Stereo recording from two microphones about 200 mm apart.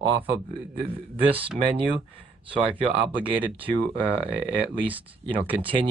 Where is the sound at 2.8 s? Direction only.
25° right (ahead or behind).